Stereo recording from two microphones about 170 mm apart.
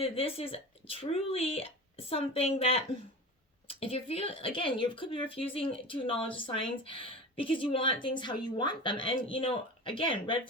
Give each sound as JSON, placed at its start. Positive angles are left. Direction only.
{"t": 0.0, "sound": "speech", "side_deg": 35}